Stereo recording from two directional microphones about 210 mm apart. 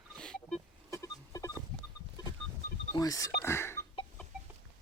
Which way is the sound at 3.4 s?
10° left (ahead or behind).